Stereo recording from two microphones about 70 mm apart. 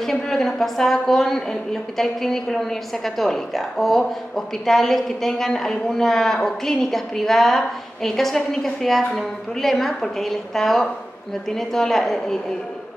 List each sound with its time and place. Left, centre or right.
0.0 s a woman's voice: centre